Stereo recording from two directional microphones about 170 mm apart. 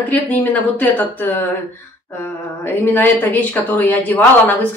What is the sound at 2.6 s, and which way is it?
Speech, 10° left (ahead or behind).